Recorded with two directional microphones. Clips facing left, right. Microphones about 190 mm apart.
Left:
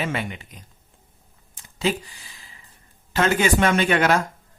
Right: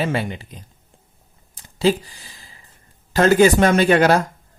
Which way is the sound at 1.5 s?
35° right (ahead or behind).